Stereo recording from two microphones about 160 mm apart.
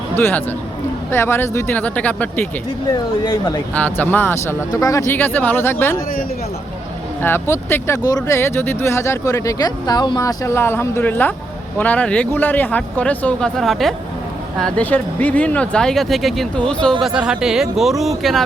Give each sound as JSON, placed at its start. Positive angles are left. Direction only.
{"t": 0.2, "sound": "speech", "side_deg": 15}
{"t": 2.9, "sound": "speech", "side_deg": 25}
{"t": 3.8, "sound": "speech", "side_deg": 10}
{"t": 7.2, "sound": "speech", "side_deg": 15}